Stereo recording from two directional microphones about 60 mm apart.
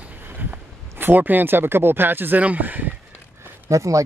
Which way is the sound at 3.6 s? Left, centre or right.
Right.